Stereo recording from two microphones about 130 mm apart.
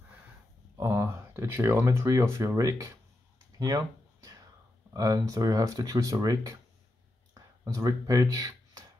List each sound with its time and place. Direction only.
0.7 s speech: 20° right (ahead or behind)
3.5 s a sound: 30° right (ahead or behind)
4.9 s speech: 25° right (ahead or behind)